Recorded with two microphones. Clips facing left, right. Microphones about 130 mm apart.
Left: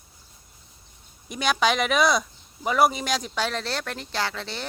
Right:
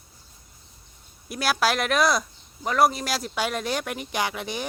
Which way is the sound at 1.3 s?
5° right (ahead or behind).